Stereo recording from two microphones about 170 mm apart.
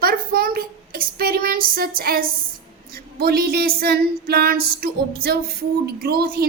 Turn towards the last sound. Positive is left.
turn(degrees=-60)  # may be behind; listen again after turning